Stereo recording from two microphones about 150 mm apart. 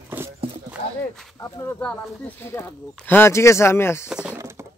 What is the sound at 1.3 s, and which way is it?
Speech, 20° left (ahead or behind).